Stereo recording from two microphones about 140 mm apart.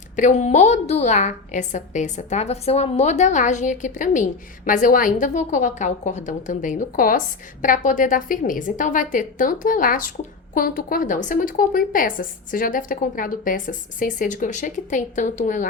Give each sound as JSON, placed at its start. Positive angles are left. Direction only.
{"t": 0.2, "sound": "a woman's voice", "side_deg": 55}